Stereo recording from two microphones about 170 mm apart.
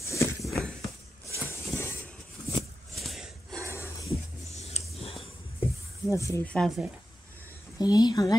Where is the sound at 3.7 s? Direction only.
15° left (ahead or behind).